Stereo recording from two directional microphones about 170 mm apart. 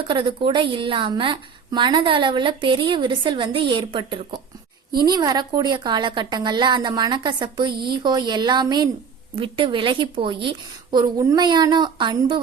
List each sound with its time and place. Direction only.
0.1 s a woman's voice: 30° right (ahead or behind)